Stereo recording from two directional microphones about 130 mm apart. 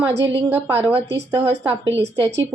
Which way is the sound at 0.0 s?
20° right (ahead or behind).